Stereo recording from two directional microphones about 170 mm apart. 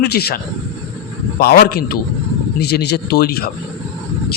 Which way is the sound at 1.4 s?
65° left (ahead or behind).